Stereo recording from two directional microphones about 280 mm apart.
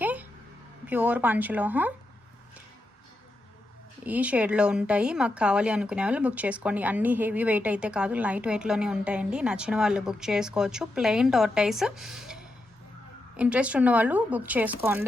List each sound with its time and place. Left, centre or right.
0.0 s a sound: centre
0.9 s speech: centre
4.0 s speech: centre